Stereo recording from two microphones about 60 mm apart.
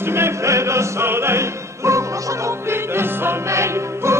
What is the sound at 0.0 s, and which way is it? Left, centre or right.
Music, right.